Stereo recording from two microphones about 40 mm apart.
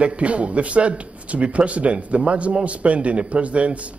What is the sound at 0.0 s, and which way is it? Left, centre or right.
Speech, right.